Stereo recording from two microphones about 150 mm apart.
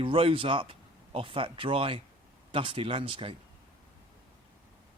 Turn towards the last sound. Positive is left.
turn(degrees=-35)  # may be behind; listen again after turning